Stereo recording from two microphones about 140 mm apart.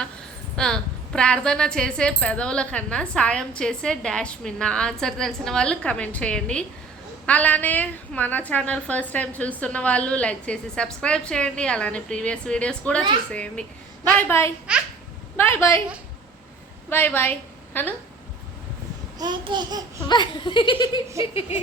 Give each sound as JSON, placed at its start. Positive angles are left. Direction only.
{"t": 0.5, "sound": "a woman's voice", "side_deg": 5}
{"t": 16.9, "sound": "a woman's voice", "side_deg": 15}
{"t": 19.2, "sound": "babbling", "side_deg": -30}
{"t": 20.1, "sound": "speech", "side_deg": 35}